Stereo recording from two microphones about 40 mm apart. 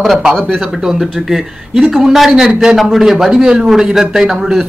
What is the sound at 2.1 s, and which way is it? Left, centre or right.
A man's voice, centre.